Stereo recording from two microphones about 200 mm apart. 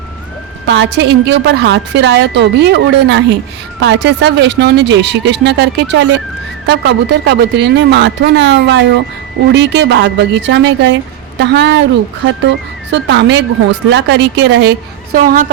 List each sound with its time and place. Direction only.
0.7 s a woman's voice: 60° right (ahead or behind)
15.1 s speech: 45° right (ahead or behind)